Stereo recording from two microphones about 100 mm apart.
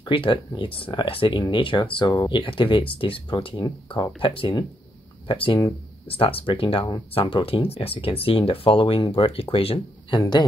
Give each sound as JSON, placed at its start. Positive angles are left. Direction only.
{"t": 0.0, "sound": "speech", "side_deg": 60}
{"t": 3.5, "sound": "speech", "side_deg": 45}
{"t": 6.0, "sound": "speech", "side_deg": 70}